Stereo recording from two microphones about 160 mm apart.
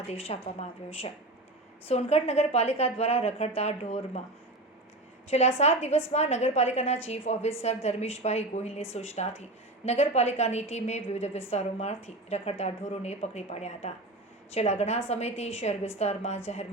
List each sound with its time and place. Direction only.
0.1 s a woman's voice: 35° left (ahead or behind)
1.9 s a woman's voice: 40° left (ahead or behind)
5.3 s a woman's voice: 40° left (ahead or behind)